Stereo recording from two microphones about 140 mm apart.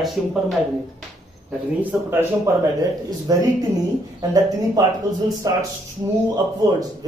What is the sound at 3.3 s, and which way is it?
Speech, 25° right (ahead or behind).